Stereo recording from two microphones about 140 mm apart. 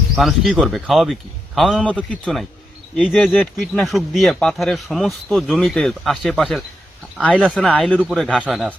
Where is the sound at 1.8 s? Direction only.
10° left (ahead or behind).